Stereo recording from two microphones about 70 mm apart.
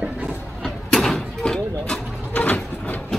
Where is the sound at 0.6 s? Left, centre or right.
Centre.